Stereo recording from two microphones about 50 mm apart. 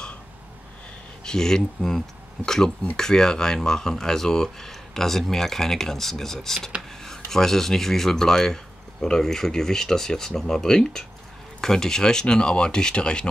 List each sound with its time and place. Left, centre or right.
1.2 s speech: centre